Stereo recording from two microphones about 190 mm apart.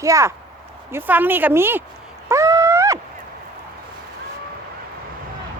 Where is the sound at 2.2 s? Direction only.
15° right (ahead or behind).